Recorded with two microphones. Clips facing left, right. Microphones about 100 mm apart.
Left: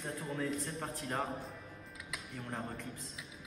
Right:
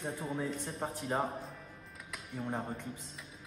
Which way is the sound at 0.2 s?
10° right (ahead or behind).